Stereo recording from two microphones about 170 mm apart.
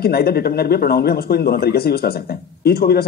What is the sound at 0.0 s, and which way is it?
Speech, 65° left (ahead or behind).